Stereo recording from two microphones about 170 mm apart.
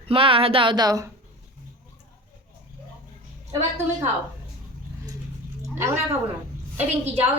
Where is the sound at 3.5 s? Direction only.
15° right (ahead or behind).